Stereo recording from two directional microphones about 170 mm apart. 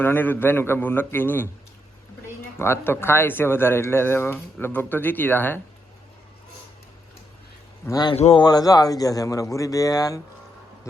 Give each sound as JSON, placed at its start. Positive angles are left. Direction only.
{"t": 0.0, "sound": "speech", "side_deg": 10}
{"t": 2.6, "sound": "speech", "side_deg": 15}
{"t": 7.9, "sound": "speech", "side_deg": 20}